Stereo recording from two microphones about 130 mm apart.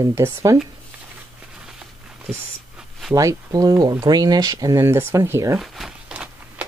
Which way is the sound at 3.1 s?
25° right (ahead or behind).